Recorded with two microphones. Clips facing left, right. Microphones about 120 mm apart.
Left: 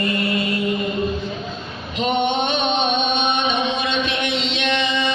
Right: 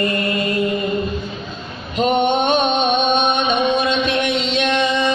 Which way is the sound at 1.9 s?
45° right (ahead or behind).